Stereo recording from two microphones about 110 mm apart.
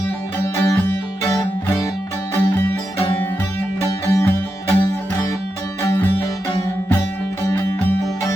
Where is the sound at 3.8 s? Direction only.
30° left (ahead or behind).